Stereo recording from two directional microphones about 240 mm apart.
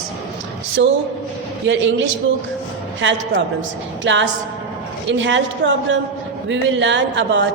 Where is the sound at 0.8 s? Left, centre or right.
Right.